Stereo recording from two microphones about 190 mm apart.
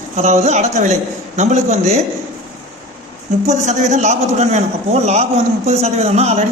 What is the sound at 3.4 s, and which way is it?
A man's voice, 40° right (ahead or behind).